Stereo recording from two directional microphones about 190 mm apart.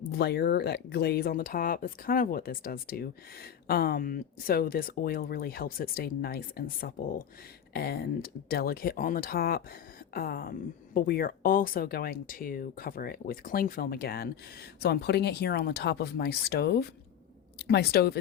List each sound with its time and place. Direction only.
0.2 s speech: 55° left (ahead or behind)